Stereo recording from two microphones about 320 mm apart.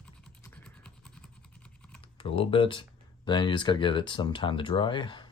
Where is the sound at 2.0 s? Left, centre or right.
Centre.